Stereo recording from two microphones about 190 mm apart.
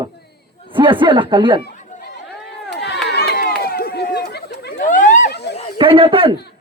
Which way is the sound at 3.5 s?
55° left (ahead or behind).